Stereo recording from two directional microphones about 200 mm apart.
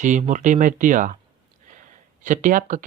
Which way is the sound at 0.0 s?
40° right (ahead or behind).